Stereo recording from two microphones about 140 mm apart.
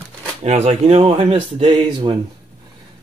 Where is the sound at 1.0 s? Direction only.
40° right (ahead or behind).